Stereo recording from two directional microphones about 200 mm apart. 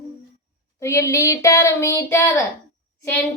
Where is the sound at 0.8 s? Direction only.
15° left (ahead or behind).